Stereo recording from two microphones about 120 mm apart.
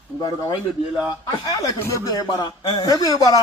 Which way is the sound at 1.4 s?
35° left (ahead or behind).